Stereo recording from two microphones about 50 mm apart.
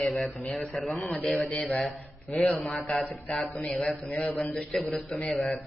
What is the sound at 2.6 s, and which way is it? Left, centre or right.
Speech, centre.